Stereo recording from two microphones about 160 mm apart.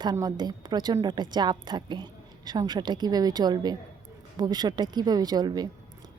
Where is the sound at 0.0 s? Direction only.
25° right (ahead or behind).